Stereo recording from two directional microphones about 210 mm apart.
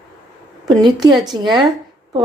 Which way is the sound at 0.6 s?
20° right (ahead or behind).